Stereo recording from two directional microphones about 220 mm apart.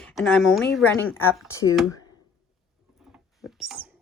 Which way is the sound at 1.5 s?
15° left (ahead or behind).